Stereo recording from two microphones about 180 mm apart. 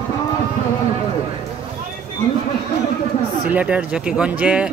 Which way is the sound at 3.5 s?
5° right (ahead or behind).